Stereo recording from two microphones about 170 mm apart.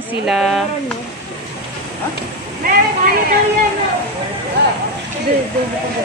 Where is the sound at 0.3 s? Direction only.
Centre (ahead or behind).